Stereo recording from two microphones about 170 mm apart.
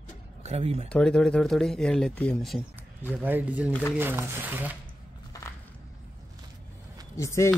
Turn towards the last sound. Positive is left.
turn(degrees=15)  # may be behind; listen again after turning